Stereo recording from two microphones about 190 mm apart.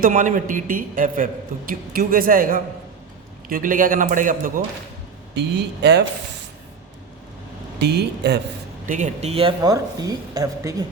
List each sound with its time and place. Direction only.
0.0 s a man's voice: 45° right (ahead or behind)
5.8 s speech: 60° right (ahead or behind)
7.8 s speech: 60° right (ahead or behind)
8.9 s a woman's voice: 40° right (ahead or behind); by 10.8 s 15° right (ahead or behind)